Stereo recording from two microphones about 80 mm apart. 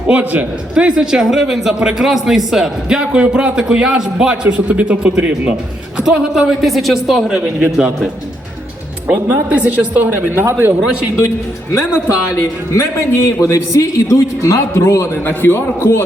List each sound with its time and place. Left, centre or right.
0.1 s a man's voice: centre
9.5 s a woman's voice: centre
12.7 s a man's voice: left